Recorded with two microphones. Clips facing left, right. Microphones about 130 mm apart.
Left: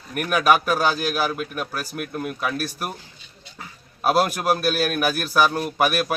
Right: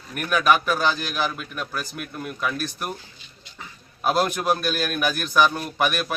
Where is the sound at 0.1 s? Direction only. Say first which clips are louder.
Left 2 dB; 50° left (ahead or behind).